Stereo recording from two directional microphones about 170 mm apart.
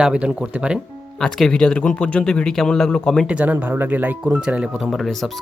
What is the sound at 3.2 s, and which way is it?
A man's voice, 10° right (ahead or behind).